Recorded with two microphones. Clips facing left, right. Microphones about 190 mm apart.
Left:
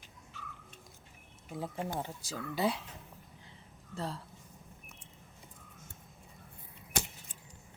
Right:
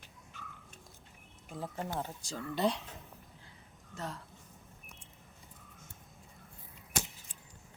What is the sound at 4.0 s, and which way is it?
Speech, 30° left (ahead or behind).